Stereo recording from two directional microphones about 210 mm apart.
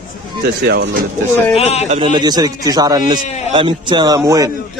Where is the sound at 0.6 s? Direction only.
50° right (ahead or behind).